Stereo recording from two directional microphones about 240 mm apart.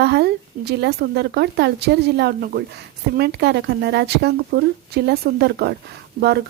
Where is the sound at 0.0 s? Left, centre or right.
Right.